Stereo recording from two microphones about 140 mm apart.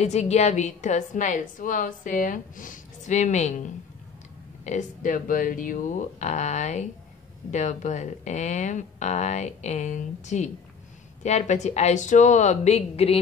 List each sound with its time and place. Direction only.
0.0 s a woman's voice: 55° left (ahead or behind)
4.6 s a woman's voice: 65° left (ahead or behind); by 13.2 s 45° left (ahead or behind)